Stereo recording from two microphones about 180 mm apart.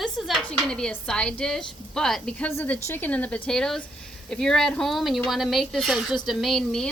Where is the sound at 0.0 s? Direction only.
Centre (ahead or behind).